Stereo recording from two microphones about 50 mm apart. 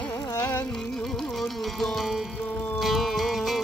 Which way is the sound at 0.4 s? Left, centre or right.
Left.